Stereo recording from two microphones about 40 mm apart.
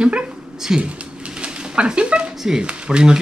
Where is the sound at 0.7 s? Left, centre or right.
Right.